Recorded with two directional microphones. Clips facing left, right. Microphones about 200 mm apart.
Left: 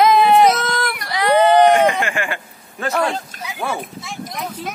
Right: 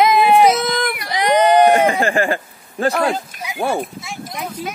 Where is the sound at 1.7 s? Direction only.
35° right (ahead or behind).